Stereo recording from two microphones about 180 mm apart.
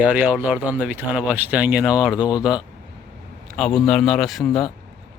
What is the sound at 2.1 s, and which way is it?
Speech, 20° left (ahead or behind).